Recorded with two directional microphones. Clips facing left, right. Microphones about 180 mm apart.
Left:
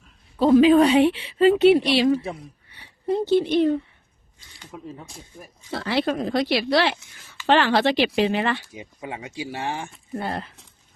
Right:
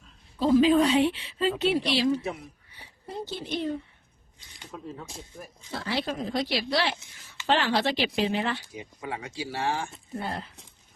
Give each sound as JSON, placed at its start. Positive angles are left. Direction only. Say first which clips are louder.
{"t": 0.3, "sound": "a woman's voice", "louder": "left 6 dB", "side_deg": 65}
{"t": 4.4, "sound": "speech", "louder": "left 1 dB", "side_deg": -20}
{"t": 5.7, "sound": "speech", "louder": "left 7 dB", "side_deg": 65}
{"t": 8.7, "sound": "speech", "louder": "left 1 dB", "side_deg": 20}
{"t": 10.2, "sound": "speech", "louder": "left 5 dB", "side_deg": 70}